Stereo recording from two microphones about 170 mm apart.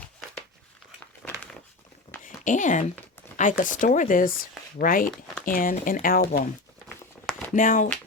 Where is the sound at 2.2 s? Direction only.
50° left (ahead or behind).